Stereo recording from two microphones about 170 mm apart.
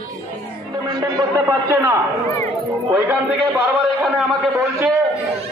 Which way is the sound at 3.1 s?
10° right (ahead or behind).